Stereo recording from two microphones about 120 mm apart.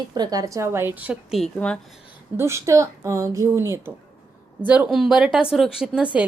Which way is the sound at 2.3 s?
20° right (ahead or behind).